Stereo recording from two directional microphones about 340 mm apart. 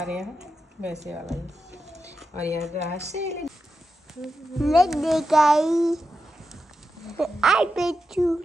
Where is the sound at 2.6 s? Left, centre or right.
Centre.